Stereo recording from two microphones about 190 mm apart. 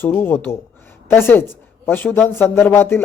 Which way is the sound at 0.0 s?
10° left (ahead or behind).